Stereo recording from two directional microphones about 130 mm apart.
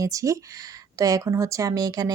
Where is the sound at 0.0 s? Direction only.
25° right (ahead or behind).